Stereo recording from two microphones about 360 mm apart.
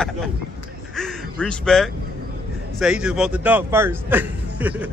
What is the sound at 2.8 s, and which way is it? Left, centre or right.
A man's voice, centre.